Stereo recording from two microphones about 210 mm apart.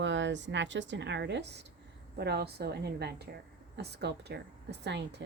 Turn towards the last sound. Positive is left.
turn(degrees=-55)  # may be behind; listen again after turning